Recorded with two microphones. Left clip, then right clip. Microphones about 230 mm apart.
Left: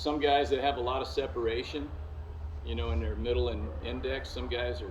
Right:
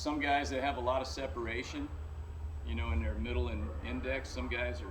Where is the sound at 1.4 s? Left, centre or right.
Centre.